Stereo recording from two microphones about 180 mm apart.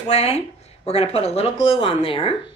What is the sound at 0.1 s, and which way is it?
Speech, 35° left (ahead or behind).